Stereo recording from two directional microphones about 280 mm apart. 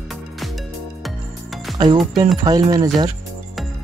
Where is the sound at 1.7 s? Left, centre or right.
Centre.